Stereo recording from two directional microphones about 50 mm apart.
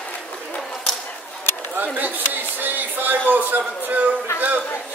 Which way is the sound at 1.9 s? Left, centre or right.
Right.